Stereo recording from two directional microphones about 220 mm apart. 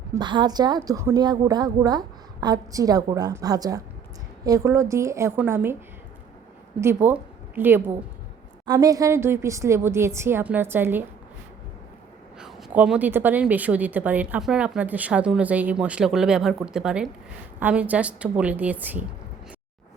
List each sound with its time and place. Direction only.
0.1 s a woman's voice: 20° right (ahead or behind)
6.8 s a woman's voice: 10° right (ahead or behind)
12.4 s a woman's voice: centre (ahead or behind)